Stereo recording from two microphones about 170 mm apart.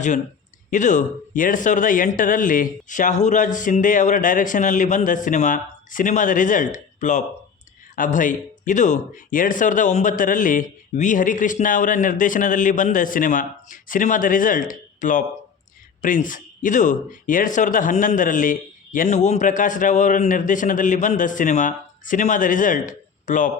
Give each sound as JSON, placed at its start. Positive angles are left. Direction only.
{"t": 0.7, "sound": "speech", "side_deg": 45}